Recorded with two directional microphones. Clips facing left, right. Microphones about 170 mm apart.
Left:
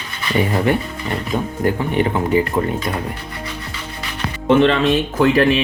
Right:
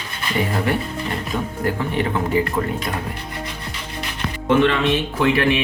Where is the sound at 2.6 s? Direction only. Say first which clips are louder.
Left 3 dB; 25° left (ahead or behind).